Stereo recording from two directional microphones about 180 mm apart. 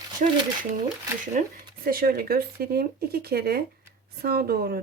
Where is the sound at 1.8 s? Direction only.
55° right (ahead or behind).